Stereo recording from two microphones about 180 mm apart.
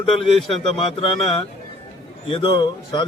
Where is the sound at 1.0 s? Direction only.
30° left (ahead or behind).